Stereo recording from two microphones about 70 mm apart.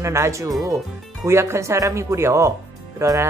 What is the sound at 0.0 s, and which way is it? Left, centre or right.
Speech, right.